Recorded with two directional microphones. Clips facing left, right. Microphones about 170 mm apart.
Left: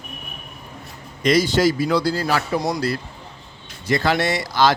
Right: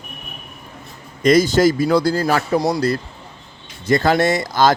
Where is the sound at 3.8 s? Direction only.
45° right (ahead or behind).